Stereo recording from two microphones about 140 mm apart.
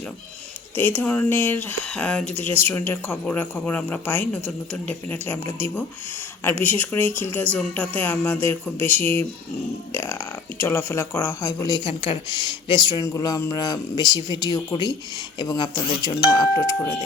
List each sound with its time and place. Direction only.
0.8 s speech: 15° left (ahead or behind)